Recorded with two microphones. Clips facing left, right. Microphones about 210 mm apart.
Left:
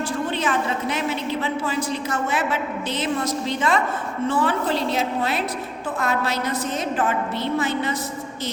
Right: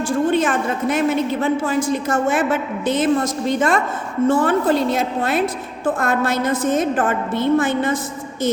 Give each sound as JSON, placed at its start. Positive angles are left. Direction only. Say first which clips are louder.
{"t": 0.3, "sound": "a woman's voice", "louder": "right 6 dB", "side_deg": -50}